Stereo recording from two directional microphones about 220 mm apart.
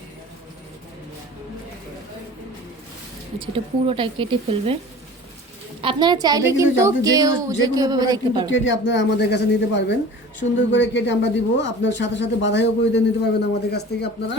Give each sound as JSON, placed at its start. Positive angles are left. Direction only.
{"t": 3.3, "sound": "speech", "side_deg": -25}
{"t": 5.8, "sound": "a woman's voice", "side_deg": -20}
{"t": 8.4, "sound": "speech", "side_deg": 60}